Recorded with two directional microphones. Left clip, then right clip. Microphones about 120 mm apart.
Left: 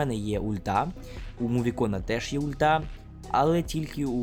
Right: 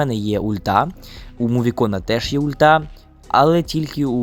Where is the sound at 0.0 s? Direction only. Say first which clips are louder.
Right 9 dB; 45° right (ahead or behind).